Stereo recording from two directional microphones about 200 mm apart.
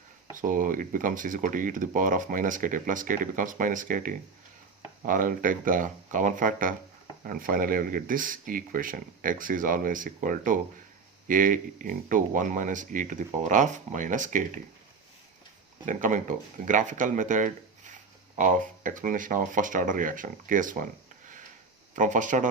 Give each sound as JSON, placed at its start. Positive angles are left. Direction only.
{"t": 0.3, "sound": "speech", "side_deg": -40}
{"t": 15.9, "sound": "speech", "side_deg": -40}
{"t": 21.9, "sound": "speech", "side_deg": -40}